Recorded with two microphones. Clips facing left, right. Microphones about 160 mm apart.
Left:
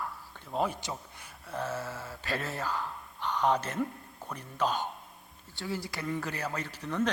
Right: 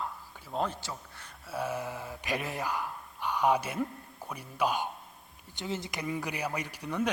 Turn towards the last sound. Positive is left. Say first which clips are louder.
# left 1 dB
turn(degrees=-10)  # may be behind; listen again after turning